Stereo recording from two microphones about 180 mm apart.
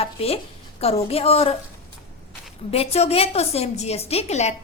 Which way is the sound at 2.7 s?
35° left (ahead or behind).